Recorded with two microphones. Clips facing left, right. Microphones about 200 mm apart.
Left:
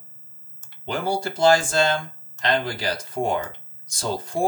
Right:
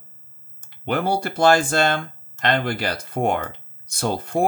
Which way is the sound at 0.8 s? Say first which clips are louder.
Right 3 dB; 60° right (ahead or behind).